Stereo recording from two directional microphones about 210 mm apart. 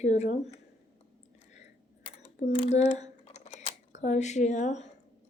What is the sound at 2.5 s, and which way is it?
Speech, 30° left (ahead or behind).